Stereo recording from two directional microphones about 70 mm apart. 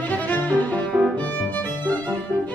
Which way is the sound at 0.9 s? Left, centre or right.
Right.